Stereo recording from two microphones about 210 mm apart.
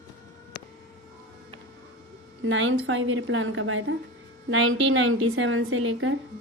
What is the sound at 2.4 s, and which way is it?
A woman's voice, 65° right (ahead or behind).